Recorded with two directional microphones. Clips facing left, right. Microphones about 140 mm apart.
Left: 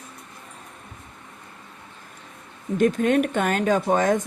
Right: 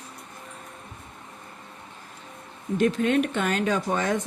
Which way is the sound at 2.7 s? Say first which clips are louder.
Left 3 dB; 45° left (ahead or behind).